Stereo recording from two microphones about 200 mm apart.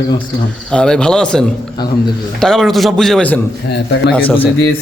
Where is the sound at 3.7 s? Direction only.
55° left (ahead or behind).